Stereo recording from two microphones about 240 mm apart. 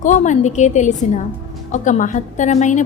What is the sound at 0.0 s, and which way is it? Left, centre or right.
A woman's voice, left.